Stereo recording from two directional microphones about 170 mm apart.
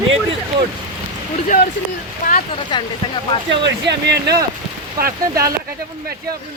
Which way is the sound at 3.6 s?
90° right.